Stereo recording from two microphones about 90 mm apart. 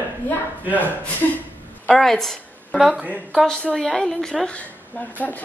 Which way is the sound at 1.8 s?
5° left (ahead or behind).